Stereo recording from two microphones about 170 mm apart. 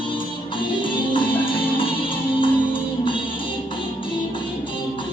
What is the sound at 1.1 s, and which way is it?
Music, 30° left (ahead or behind).